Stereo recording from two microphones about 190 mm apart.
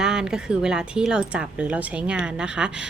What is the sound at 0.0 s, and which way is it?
A woman's voice, 5° right (ahead or behind).